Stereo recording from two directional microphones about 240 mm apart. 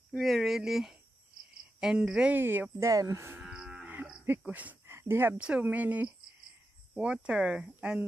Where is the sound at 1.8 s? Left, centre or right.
Centre.